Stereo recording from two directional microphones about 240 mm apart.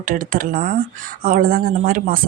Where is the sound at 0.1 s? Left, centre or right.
Right.